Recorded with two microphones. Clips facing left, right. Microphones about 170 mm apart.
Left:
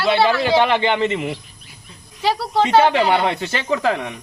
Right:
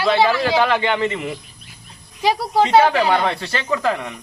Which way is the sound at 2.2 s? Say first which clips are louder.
Right 1 dB; 10° right (ahead or behind).